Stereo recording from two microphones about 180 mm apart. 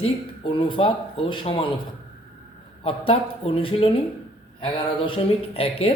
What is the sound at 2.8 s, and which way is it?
Speech, 30° left (ahead or behind).